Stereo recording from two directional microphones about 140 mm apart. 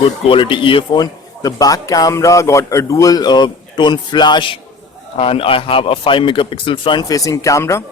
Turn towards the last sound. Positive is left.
turn(degrees=20)  # may be behind; listen again after turning